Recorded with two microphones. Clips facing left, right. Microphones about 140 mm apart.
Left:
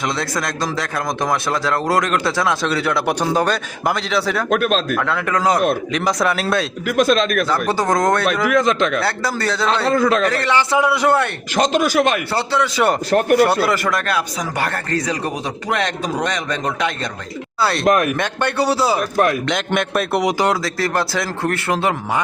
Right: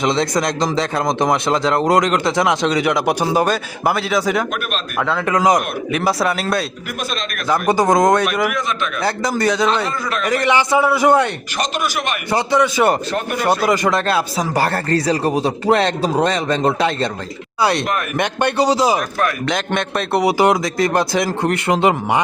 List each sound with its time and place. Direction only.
0.0 s a man's voice: 20° right (ahead or behind); by 5.2 s centre (ahead or behind)
5.2 s a man's voice: 15° right (ahead or behind)
6.8 s speech: 90° left
7.5 s speech: 15° right (ahead or behind)
12.3 s speech: 15° right (ahead or behind); by 17.1 s 30° right (ahead or behind)
17.6 s speech: 20° right (ahead or behind)
17.8 s speech: 90° left
18.2 s speech: 15° right (ahead or behind)
19.5 s a man's voice: centre (ahead or behind)
20.4 s speech: 15° right (ahead or behind)